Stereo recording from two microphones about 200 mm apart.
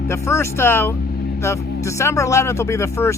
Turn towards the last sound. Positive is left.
turn(degrees=15)  # may be behind; listen again after turning